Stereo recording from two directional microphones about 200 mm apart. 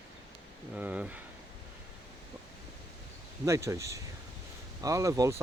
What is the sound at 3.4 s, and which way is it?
Speech, 15° right (ahead or behind).